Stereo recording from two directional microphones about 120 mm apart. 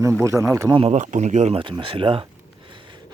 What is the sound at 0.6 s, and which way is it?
Speech, 45° right (ahead or behind).